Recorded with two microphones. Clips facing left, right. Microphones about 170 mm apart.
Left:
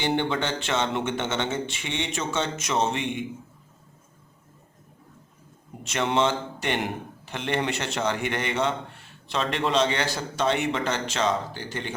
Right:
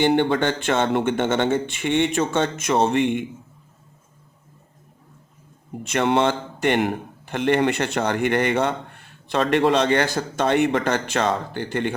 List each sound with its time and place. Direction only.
0.0 s speech: 55° right (ahead or behind)
5.8 s a man's voice: 55° right (ahead or behind)